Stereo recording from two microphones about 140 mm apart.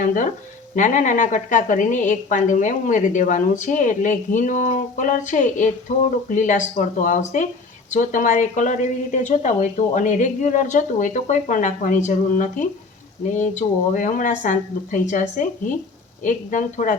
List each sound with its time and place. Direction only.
0.0 s a woman's voice: 65° left (ahead or behind)